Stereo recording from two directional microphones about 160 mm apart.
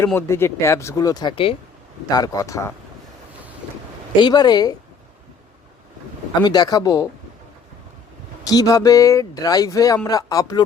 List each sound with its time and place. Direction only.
0.0 s speech: 15° left (ahead or behind)
4.2 s speech: 25° left (ahead or behind)
6.4 s speech: 25° left (ahead or behind)
8.4 s speech: 25° left (ahead or behind)